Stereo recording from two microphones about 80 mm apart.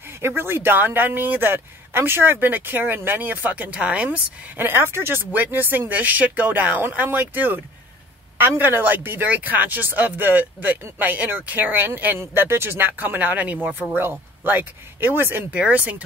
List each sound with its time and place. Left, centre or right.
0.2 s speech: right
15.5 s speech: centre